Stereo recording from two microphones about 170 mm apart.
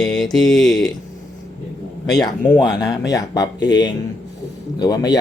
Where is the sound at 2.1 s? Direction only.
Centre (ahead or behind).